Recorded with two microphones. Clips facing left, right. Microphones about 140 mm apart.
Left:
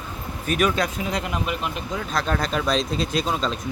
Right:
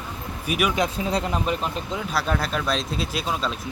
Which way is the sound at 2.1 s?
5° right (ahead or behind).